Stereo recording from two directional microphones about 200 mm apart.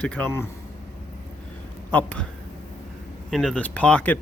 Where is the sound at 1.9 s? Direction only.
10° left (ahead or behind).